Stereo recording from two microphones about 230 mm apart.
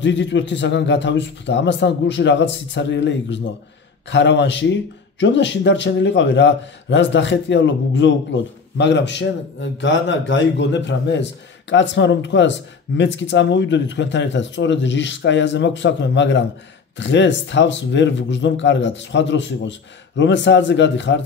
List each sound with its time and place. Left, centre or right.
0.0 s a man's voice: left